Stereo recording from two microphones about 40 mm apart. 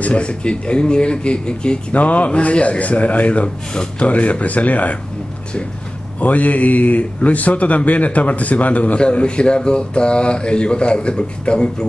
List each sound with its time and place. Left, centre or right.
0.0 s speech: left
2.0 s speech: left
6.1 s speech: left